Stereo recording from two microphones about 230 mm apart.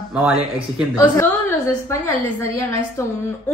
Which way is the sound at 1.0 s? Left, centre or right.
Centre.